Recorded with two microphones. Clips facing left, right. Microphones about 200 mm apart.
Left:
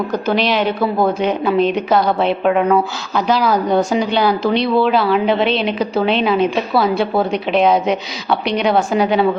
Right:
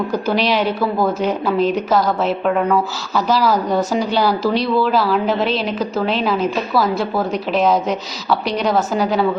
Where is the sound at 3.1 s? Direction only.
5° right (ahead or behind).